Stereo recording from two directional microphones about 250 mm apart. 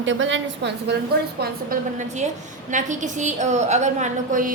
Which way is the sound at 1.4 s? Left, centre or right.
Right.